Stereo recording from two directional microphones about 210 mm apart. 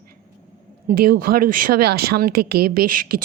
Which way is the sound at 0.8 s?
45° right (ahead or behind).